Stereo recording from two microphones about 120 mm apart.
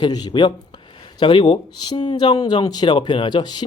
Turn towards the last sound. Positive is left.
turn(degrees=35)  # may be behind; listen again after turning